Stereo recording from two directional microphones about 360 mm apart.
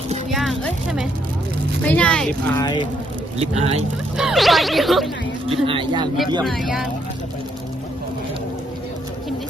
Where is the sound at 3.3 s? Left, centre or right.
Centre.